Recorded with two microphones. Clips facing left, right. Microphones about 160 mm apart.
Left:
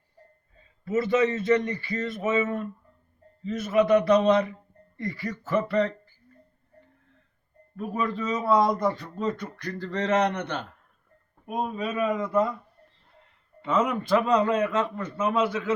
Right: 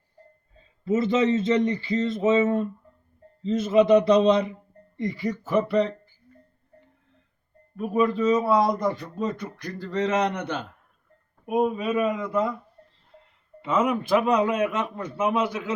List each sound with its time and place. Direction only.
0.9 s a man's voice: 20° right (ahead or behind)
7.8 s a man's voice: 15° right (ahead or behind)
13.6 s a man's voice: 10° right (ahead or behind)